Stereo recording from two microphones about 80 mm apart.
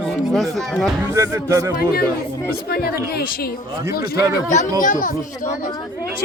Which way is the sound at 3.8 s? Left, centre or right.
Right.